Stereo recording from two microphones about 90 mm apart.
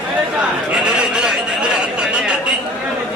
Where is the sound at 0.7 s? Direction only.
10° right (ahead or behind).